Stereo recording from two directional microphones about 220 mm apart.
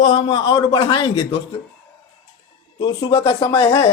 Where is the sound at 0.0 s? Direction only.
25° left (ahead or behind).